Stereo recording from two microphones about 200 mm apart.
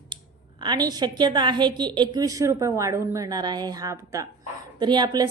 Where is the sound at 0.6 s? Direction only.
20° right (ahead or behind).